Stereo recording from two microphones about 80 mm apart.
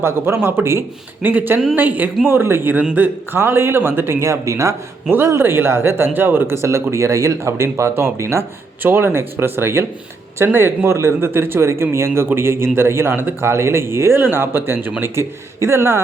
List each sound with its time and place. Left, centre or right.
0.0 s speech: right
1.3 s speech: centre; by 4.7 s right
5.0 s speech: right
15.1 s speech: right